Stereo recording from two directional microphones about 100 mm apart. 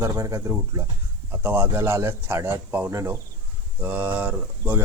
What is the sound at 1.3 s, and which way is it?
Speech, 20° right (ahead or behind).